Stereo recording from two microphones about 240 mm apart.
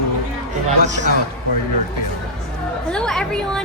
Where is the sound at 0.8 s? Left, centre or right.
Right.